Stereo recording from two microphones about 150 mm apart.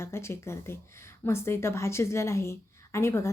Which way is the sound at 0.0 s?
15° left (ahead or behind).